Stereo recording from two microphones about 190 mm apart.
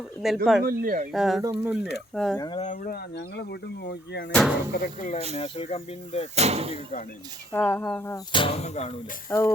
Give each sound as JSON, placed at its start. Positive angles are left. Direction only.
{"t": 0.2, "sound": "speech", "side_deg": 0}
{"t": 0.6, "sound": "speech", "side_deg": -50}
{"t": 1.1, "sound": "speech", "side_deg": 0}
{"t": 1.4, "sound": "speech", "side_deg": -15}
{"t": 2.1, "sound": "speech", "side_deg": 5}
{"t": 2.6, "sound": "speech", "side_deg": 45}
{"t": 3.2, "sound": "speech", "side_deg": 60}
{"t": 4.3, "sound": "speech", "side_deg": 5}
{"t": 4.7, "sound": "speech", "side_deg": 40}
{"t": 5.4, "sound": "speech", "side_deg": 30}
{"t": 6.3, "sound": "speech", "side_deg": -35}
{"t": 7.5, "sound": "speech", "side_deg": 10}
{"t": 8.3, "sound": "speech", "side_deg": 25}
{"t": 9.3, "sound": "speech", "side_deg": 10}